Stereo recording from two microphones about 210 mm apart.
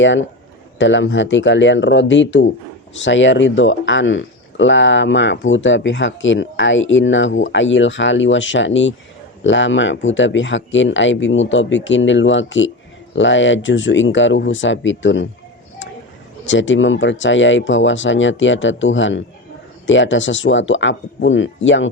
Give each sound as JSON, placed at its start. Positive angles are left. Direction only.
{"t": 0.0, "sound": "speech", "side_deg": 60}
{"t": 16.5, "sound": "speech", "side_deg": 65}